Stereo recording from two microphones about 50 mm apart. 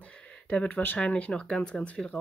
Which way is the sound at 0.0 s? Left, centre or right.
Left.